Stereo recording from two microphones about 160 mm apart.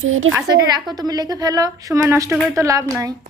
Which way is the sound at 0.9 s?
25° right (ahead or behind).